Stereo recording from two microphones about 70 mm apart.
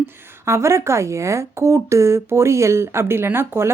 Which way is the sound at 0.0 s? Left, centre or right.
Right.